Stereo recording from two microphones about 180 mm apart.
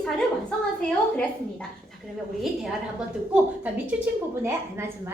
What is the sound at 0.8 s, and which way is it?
Speech, 5° left (ahead or behind).